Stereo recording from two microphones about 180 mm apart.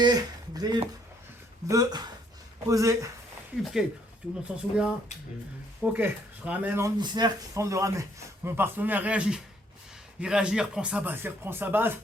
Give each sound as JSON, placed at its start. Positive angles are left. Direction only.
{"t": 0.0, "sound": "speech", "side_deg": -20}
{"t": 3.6, "sound": "speech", "side_deg": 0}
{"t": 7.0, "sound": "speech", "side_deg": -25}